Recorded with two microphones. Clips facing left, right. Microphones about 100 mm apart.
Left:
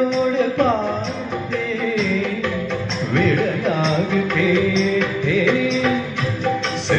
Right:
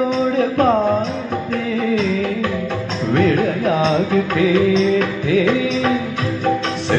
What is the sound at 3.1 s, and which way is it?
Music, 45° right (ahead or behind).